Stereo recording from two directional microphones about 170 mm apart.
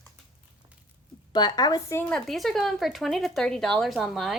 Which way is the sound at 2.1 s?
Centre (ahead or behind).